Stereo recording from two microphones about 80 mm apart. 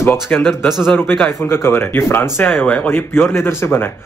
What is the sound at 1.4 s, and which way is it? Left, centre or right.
Speech, left.